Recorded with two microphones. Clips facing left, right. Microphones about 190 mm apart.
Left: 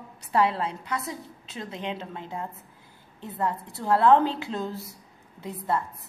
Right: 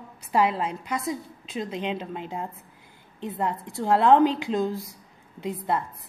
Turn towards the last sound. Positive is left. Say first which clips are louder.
# right 2 dB
turn(degrees=-20)  # may be behind; listen again after turning